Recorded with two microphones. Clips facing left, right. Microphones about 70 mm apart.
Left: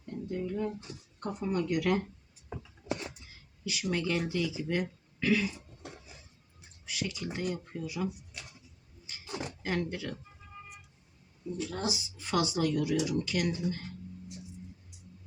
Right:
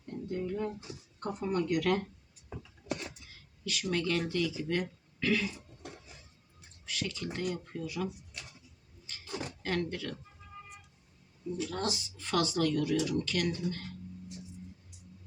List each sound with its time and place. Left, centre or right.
0.3 s speech: centre
2.9 s a sound: left
3.6 s speech: centre
9.0 s a sound: centre
9.6 s speech: centre
11.5 s speech: centre